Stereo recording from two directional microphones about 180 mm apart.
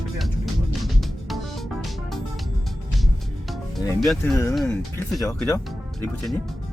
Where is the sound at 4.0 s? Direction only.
Centre (ahead or behind).